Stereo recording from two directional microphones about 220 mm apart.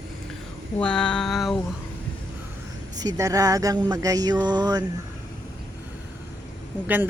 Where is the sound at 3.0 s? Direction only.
15° right (ahead or behind).